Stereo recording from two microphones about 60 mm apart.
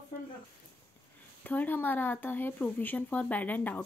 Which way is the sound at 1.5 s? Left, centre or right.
Left.